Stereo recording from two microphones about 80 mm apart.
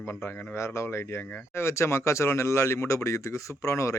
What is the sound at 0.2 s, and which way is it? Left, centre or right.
Speech, left.